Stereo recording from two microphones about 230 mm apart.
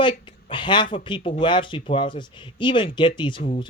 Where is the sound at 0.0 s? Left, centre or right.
Left.